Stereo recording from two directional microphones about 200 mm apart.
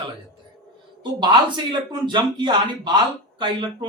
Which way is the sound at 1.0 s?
25° right (ahead or behind).